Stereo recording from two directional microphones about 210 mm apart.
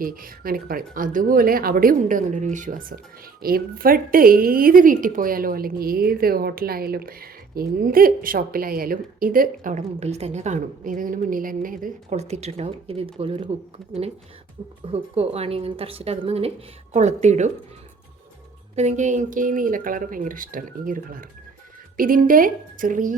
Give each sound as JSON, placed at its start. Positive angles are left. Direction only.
{"t": 0.0, "sound": "a woman's voice", "side_deg": -40}
{"t": 14.8, "sound": "a woman's voice", "side_deg": -30}
{"t": 18.8, "sound": "a woman's voice", "side_deg": -35}